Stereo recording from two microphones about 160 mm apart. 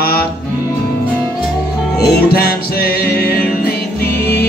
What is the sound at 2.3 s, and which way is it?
Music, 75° left (ahead or behind).